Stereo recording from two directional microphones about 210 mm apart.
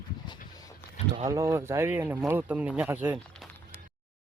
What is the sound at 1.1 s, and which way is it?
Speech, 15° right (ahead or behind).